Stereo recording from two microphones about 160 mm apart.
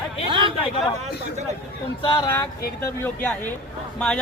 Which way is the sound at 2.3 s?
15° left (ahead or behind).